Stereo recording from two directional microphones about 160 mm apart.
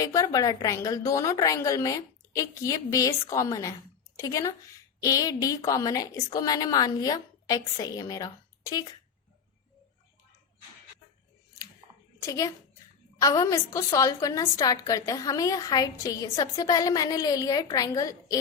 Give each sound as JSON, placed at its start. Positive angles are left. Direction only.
{"t": 0.0, "sound": "a woman's voice", "side_deg": 20}
{"t": 12.2, "sound": "a woman's voice", "side_deg": 20}